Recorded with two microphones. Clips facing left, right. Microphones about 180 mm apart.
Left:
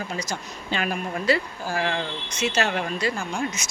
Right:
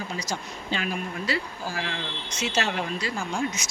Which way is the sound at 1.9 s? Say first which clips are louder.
Left 6 dB; 55° left (ahead or behind).